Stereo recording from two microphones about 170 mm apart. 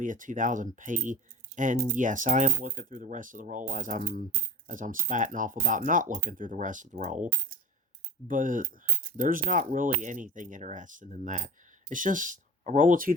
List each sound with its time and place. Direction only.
0.0 s speech: 50° right (ahead or behind)
8.3 s speech: 50° right (ahead or behind)